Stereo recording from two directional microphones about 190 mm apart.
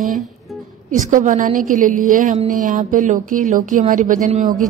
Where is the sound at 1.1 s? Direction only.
45° right (ahead or behind).